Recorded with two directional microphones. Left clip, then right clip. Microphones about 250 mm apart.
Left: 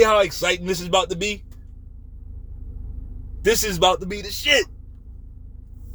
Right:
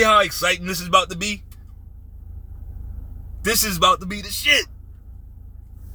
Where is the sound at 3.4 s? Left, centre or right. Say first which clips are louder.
Even; centre.